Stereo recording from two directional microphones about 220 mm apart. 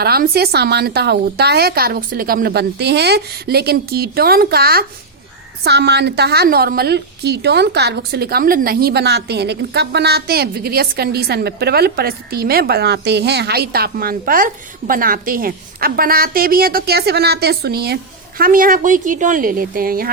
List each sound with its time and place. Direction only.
0.0 s a woman's voice: 45° right (ahead or behind)